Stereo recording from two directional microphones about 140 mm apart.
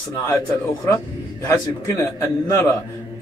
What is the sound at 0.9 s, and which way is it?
A man's voice, 20° left (ahead or behind).